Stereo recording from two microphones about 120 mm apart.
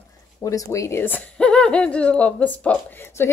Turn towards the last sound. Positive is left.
turn(degrees=20)  # may be behind; listen again after turning